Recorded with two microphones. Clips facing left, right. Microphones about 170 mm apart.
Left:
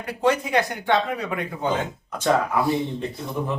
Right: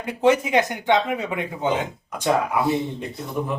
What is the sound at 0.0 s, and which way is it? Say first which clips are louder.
Speech: right 3 dB; 20° right (ahead or behind).